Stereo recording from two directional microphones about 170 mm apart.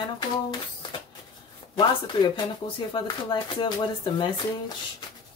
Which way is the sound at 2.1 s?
30° left (ahead or behind).